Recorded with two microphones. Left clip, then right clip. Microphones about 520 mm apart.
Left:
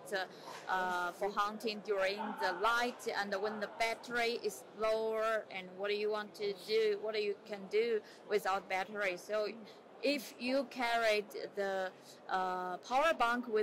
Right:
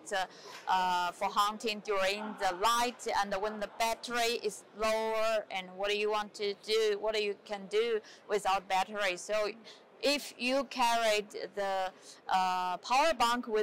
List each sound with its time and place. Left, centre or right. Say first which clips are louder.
0.7 s speech: right 5 dB; right